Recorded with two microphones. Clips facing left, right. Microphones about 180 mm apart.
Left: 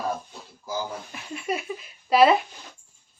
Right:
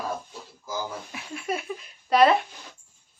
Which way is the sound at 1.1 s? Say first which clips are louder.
Left 1 dB; centre (ahead or behind).